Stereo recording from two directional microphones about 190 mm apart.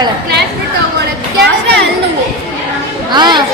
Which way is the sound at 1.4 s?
60° right (ahead or behind).